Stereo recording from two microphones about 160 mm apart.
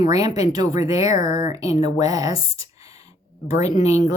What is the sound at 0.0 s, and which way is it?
A woman's voice, 25° right (ahead or behind).